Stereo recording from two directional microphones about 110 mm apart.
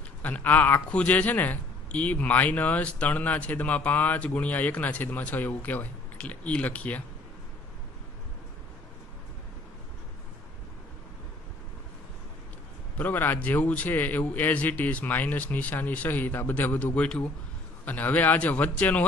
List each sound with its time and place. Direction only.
0.2 s speech: 15° left (ahead or behind)
12.9 s speech: 15° left (ahead or behind)